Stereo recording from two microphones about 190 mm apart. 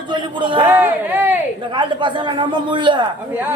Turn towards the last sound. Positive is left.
turn(degrees=-25)  # may be behind; listen again after turning